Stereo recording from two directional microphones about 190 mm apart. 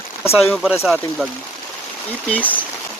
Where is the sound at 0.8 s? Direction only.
Centre (ahead or behind).